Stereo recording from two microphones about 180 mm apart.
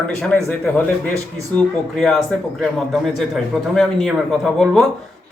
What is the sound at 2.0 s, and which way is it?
Speech, centre (ahead or behind).